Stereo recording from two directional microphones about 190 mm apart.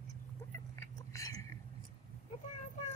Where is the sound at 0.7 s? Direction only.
15° left (ahead or behind).